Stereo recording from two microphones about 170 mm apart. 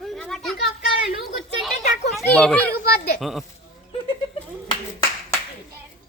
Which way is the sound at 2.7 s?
65° left (ahead or behind).